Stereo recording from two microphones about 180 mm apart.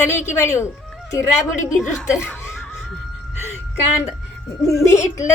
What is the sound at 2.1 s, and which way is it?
Laughter, 10° left (ahead or behind).